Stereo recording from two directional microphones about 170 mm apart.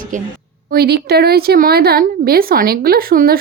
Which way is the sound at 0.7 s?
70° right (ahead or behind).